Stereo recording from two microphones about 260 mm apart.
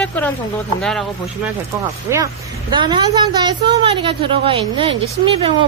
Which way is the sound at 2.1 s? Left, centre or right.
Centre.